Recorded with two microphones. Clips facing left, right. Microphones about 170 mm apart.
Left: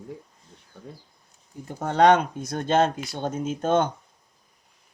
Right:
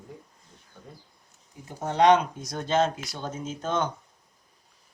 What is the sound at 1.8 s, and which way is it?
Speech, 55° left (ahead or behind).